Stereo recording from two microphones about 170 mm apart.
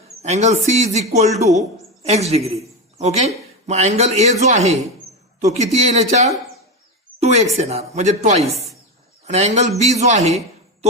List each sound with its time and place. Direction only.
0.2 s speech: 40° right (ahead or behind)